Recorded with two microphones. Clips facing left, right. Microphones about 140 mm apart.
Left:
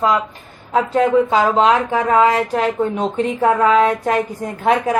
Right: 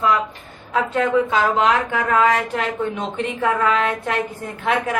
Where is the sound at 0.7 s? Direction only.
35° left (ahead or behind).